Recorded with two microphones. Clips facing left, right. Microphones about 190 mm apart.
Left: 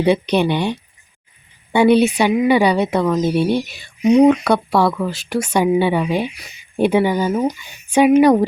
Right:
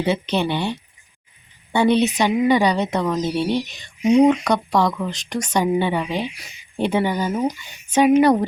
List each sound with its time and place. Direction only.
0.0 s speech: 15° left (ahead or behind)
3.2 s speech: 50° left (ahead or behind)
3.7 s speech: 10° left (ahead or behind)